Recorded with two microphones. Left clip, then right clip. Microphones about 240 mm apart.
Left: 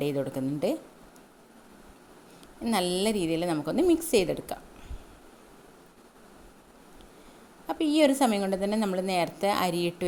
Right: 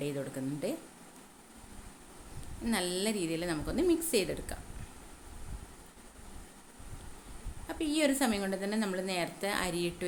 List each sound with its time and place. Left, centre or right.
0.0 s a woman's voice: left
2.6 s a woman's voice: left
7.7 s a woman's voice: left